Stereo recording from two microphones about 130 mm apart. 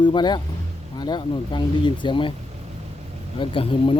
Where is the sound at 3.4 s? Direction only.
40° left (ahead or behind).